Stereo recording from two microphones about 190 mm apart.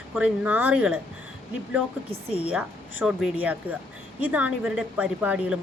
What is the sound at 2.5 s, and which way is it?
A woman's voice, 5° right (ahead or behind).